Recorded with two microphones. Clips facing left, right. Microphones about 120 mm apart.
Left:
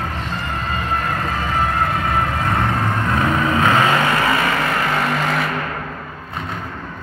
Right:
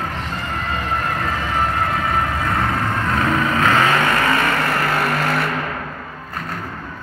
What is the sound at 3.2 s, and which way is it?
Vehicle, 20° left (ahead or behind).